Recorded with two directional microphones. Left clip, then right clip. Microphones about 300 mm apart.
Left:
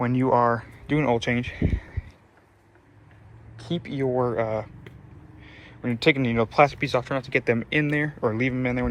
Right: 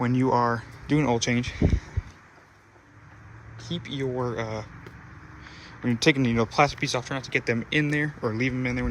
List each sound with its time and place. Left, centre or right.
0.0 s speech: centre
3.8 s speech: centre
5.4 s a sound: right
5.8 s speech: centre